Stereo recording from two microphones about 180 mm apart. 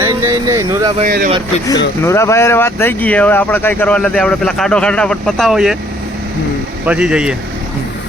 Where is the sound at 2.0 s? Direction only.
15° left (ahead or behind); by 5.8 s centre (ahead or behind).